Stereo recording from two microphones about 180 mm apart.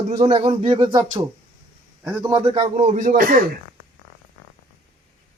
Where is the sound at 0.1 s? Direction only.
35° right (ahead or behind).